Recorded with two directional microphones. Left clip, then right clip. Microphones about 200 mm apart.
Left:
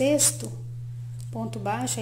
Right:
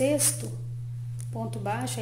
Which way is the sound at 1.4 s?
20° left (ahead or behind).